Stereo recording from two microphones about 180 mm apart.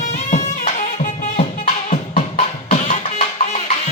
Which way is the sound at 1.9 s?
35° left (ahead or behind).